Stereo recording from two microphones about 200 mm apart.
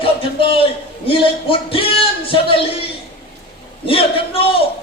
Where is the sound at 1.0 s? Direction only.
25° left (ahead or behind).